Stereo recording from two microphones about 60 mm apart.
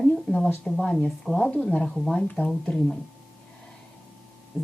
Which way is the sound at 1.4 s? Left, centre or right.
Left.